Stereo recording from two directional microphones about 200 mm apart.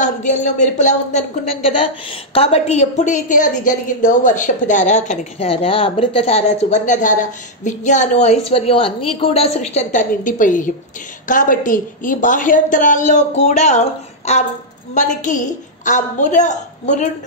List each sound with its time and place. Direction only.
0.0 s a woman's voice: 40° left (ahead or behind)